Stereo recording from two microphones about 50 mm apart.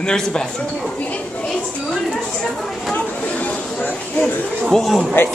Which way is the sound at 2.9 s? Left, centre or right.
Left.